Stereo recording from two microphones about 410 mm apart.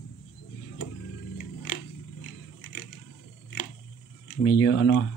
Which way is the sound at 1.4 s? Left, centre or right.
Left.